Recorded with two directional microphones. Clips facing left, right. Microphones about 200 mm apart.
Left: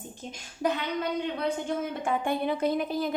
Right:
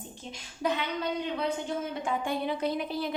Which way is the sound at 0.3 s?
45° left (ahead or behind).